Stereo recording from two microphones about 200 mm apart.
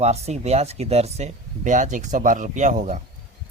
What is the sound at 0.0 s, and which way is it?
Speech, 30° right (ahead or behind).